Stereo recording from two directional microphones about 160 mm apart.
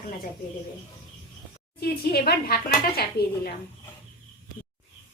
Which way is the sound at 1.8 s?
75° left (ahead or behind).